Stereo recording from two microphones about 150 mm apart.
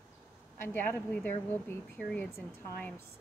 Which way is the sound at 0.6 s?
15° left (ahead or behind).